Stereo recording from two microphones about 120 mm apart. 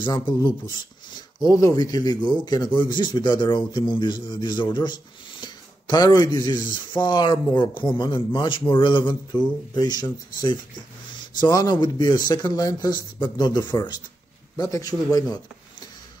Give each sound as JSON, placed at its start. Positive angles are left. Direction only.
{"t": 0.3, "sound": "speech", "side_deg": 40}